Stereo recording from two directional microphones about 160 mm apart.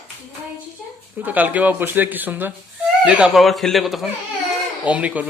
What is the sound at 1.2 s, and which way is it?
A woman's voice, 10° right (ahead or behind).